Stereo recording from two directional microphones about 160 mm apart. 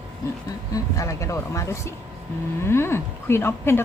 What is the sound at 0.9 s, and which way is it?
A woman's voice, 20° left (ahead or behind).